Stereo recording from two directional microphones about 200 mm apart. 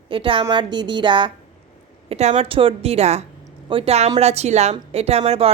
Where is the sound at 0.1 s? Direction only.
25° right (ahead or behind).